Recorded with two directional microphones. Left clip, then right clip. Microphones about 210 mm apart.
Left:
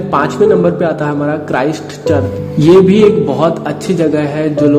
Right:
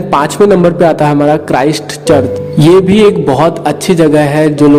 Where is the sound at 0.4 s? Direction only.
30° right (ahead or behind).